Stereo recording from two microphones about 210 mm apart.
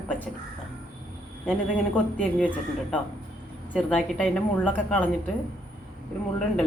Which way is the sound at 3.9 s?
5° left (ahead or behind).